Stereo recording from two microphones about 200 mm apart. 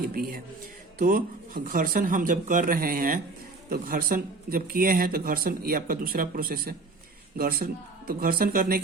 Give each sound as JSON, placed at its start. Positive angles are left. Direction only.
{"t": 0.1, "sound": "speech", "side_deg": -45}